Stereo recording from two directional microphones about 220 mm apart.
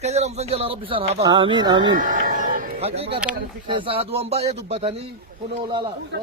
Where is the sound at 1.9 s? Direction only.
35° right (ahead or behind).